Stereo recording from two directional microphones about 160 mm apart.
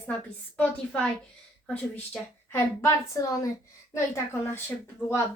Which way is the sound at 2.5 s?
15° left (ahead or behind).